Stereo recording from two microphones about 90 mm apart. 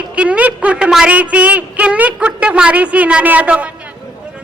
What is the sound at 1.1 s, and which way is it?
A woman's voice, 15° right (ahead or behind).